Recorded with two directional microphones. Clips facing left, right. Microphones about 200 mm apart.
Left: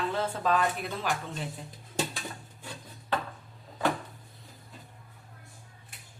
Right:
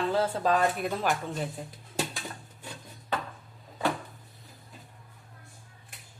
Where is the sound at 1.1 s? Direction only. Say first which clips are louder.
Right 2 dB; 50° right (ahead or behind).